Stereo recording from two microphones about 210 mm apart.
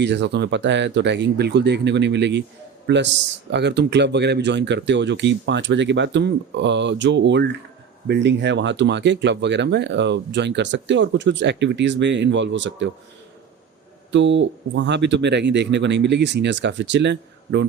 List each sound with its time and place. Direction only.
0.0 s a man's voice: 55° right (ahead or behind)
14.1 s speech: 60° right (ahead or behind)